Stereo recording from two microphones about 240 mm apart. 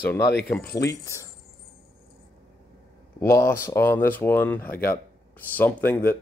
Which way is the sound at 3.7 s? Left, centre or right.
Centre.